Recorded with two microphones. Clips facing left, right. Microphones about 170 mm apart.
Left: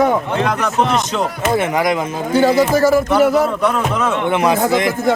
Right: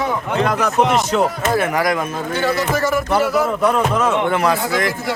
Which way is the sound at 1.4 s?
20° left (ahead or behind).